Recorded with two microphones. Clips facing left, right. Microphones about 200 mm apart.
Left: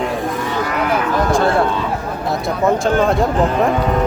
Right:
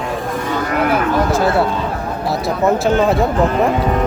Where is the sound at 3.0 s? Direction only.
Centre (ahead or behind).